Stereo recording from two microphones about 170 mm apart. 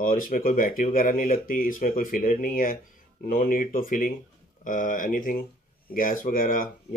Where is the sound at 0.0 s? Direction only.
55° left (ahead or behind).